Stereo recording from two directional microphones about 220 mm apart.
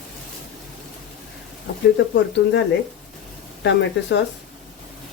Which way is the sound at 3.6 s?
55° left (ahead or behind).